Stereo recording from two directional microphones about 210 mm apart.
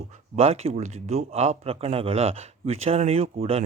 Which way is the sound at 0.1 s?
30° right (ahead or behind).